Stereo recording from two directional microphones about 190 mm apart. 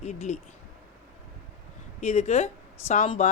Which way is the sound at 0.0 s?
35° left (ahead or behind).